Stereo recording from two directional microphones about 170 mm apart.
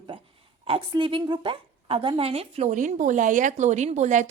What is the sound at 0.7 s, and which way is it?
A woman's voice, 30° right (ahead or behind).